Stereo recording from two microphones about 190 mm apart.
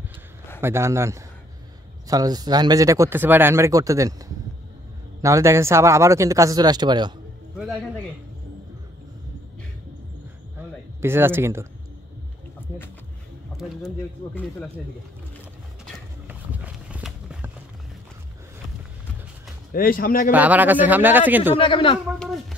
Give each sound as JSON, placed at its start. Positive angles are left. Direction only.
{"t": 0.6, "sound": "speech", "side_deg": -15}
{"t": 5.2, "sound": "speech", "side_deg": -15}
{"t": 7.5, "sound": "speech", "side_deg": -5}
{"t": 11.0, "sound": "speech", "side_deg": -10}
{"t": 13.6, "sound": "speech", "side_deg": 5}
{"t": 16.3, "sound": "a sound", "side_deg": -10}
{"t": 19.7, "sound": "speech", "side_deg": 50}
{"t": 20.2, "sound": "speech", "side_deg": -10}
{"t": 21.5, "sound": "speech", "side_deg": 30}
{"t": 22.2, "sound": "speech", "side_deg": 0}